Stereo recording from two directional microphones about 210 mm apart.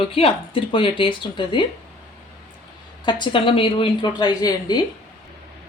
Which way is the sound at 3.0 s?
25° left (ahead or behind).